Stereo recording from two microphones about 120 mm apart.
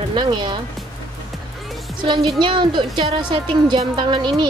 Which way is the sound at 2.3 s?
40° right (ahead or behind).